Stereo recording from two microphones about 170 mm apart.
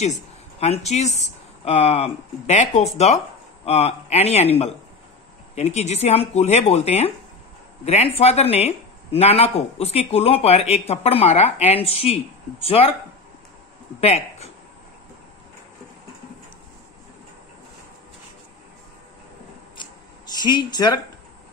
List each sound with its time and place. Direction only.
0.0 s speech: 40° left (ahead or behind)
14.0 s speech: 40° left (ahead or behind)
19.8 s a sound: 25° left (ahead or behind)